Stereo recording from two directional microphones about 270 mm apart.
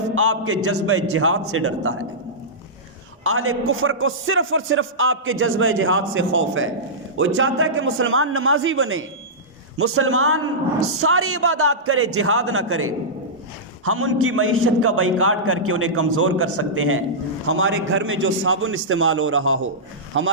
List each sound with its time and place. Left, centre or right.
0.1 s a man's voice: right
3.2 s a man's voice: right